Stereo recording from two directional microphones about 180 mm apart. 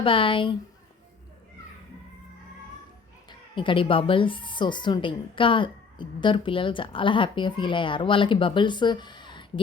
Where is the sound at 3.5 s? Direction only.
30° left (ahead or behind).